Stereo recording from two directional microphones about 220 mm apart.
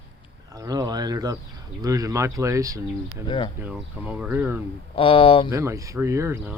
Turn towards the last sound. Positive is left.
turn(degrees=-10)  # may be behind; listen again after turning